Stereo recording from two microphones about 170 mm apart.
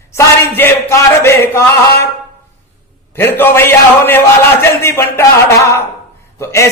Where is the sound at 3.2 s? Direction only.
15° left (ahead or behind).